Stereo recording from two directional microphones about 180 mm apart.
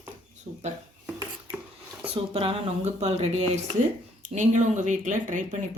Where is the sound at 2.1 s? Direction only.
30° right (ahead or behind).